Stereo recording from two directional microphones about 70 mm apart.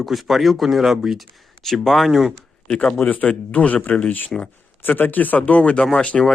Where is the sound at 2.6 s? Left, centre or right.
Centre.